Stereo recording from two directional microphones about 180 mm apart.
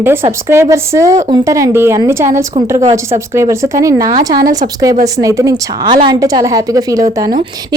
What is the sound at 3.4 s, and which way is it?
A woman's voice, 15° right (ahead or behind).